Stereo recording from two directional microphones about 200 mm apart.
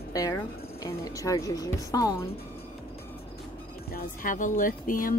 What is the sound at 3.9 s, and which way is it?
Speech, 45° left (ahead or behind).